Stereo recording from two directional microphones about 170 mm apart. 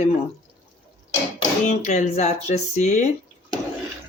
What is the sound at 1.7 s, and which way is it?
Speech, 45° left (ahead or behind).